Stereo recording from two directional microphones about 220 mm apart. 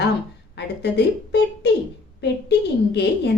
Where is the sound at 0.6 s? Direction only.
50° left (ahead or behind).